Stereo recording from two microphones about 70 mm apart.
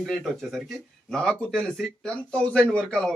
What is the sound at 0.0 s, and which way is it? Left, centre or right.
A man's voice, centre.